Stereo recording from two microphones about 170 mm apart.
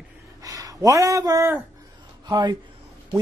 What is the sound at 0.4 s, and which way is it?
Speech, 20° right (ahead or behind).